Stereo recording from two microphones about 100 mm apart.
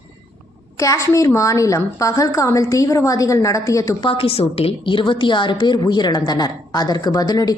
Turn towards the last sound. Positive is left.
turn(degrees=40)  # may be behind; listen again after turning